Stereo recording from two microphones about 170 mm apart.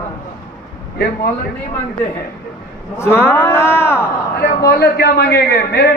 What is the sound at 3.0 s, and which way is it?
Speech, 15° left (ahead or behind).